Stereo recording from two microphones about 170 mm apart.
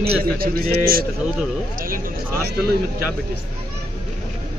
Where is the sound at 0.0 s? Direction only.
65° right (ahead or behind).